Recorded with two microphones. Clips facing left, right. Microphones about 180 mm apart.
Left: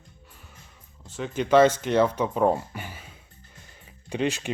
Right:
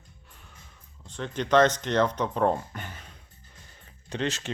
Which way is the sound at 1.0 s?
5° left (ahead or behind).